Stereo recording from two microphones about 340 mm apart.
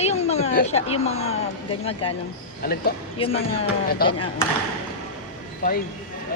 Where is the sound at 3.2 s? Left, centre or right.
Centre.